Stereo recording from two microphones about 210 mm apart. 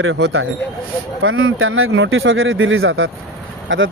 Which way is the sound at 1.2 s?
70° right (ahead or behind).